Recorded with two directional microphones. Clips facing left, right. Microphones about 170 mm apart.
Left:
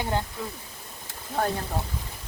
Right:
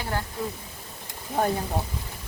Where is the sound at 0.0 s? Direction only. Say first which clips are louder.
Left 3 dB; 20° left (ahead or behind).